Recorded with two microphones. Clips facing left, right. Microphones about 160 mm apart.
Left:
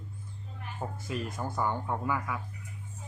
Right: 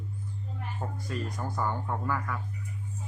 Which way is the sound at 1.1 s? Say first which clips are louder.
Even; 20° left (ahead or behind).